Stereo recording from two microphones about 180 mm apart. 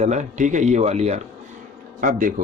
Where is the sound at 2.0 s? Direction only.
50° right (ahead or behind).